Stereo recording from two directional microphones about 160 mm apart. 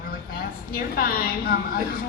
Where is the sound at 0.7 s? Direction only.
70° left (ahead or behind).